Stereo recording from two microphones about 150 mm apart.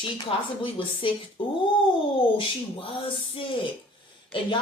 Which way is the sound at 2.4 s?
35° left (ahead or behind).